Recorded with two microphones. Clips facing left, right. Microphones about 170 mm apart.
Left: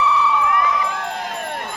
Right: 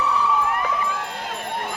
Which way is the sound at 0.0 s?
45° right (ahead or behind).